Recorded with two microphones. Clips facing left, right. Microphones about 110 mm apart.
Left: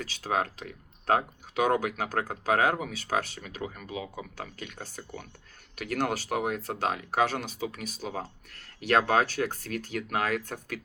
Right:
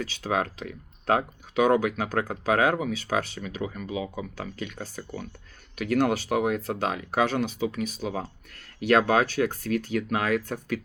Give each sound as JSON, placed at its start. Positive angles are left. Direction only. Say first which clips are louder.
{"t": 0.0, "sound": "speech", "louder": "right 2 dB", "side_deg": 45}